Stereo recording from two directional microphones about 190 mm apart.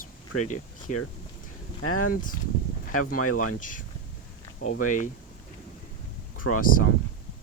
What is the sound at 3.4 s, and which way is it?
Speech, 45° left (ahead or behind).